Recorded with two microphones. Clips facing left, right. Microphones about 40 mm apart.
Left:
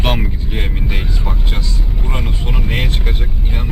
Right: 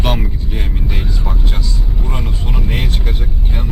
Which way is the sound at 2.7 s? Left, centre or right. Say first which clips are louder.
Left 3 dB; left.